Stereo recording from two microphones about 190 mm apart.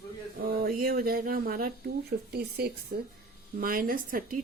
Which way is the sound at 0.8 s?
50° right (ahead or behind).